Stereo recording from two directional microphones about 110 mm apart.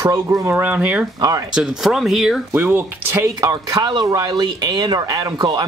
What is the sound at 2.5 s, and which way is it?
Speech, 20° right (ahead or behind).